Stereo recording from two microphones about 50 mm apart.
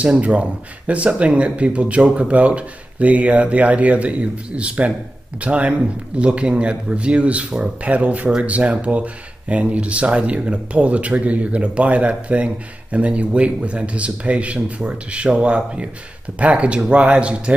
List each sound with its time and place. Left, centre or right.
0.0 s speech: right